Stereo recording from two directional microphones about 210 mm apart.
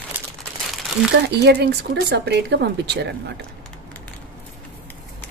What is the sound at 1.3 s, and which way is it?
Speech, 50° right (ahead or behind).